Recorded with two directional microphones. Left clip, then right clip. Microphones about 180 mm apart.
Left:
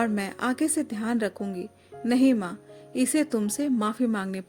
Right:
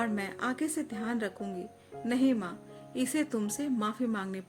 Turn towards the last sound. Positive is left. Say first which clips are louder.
# left 6 dB
turn(degrees=45)  # may be behind; listen again after turning